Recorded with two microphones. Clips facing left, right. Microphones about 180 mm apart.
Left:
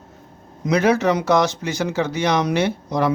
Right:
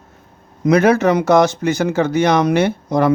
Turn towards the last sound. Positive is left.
turn(degrees=-50)  # may be behind; listen again after turning